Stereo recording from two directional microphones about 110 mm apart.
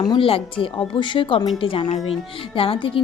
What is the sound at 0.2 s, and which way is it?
A woman's voice, 55° left (ahead or behind).